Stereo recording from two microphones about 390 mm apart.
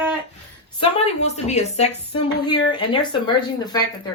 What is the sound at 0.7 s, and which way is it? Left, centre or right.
Speech, centre.